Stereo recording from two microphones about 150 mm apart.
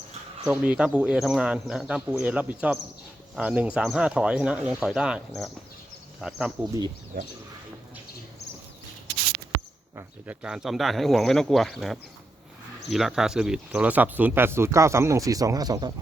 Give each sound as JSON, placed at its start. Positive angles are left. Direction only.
{"t": 0.4, "sound": "speech", "side_deg": -5}
{"t": 9.9, "sound": "speech", "side_deg": -5}